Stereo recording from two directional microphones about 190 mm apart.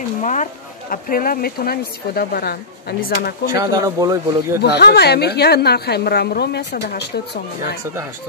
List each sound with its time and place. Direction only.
0.2 s speech: 40° left (ahead or behind)
3.5 s a man's voice: 20° right (ahead or behind)
4.6 s a woman's voice: 60° left (ahead or behind)